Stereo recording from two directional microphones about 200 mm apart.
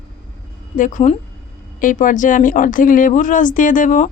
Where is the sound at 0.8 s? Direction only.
40° left (ahead or behind).